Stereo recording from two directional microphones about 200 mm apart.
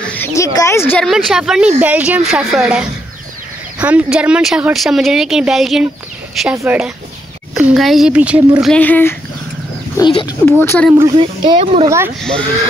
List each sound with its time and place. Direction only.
0.0 s speech: 10° left (ahead or behind)
6.5 s speech: 15° right (ahead or behind)
7.5 s speech: centre (ahead or behind)
8.7 s speech: 10° left (ahead or behind)
9.9 s speech: 20° left (ahead or behind)
11.0 s speech: 20° right (ahead or behind)
12.2 s speech: 5° left (ahead or behind)